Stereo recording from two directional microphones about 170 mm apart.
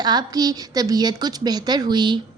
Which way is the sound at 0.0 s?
25° right (ahead or behind).